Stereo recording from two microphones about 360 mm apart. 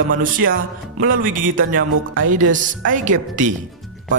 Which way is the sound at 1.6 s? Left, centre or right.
Right.